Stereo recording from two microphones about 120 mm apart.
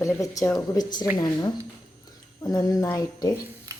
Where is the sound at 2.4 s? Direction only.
30° left (ahead or behind).